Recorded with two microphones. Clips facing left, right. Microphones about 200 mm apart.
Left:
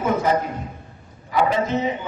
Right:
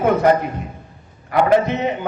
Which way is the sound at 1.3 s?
65° right (ahead or behind).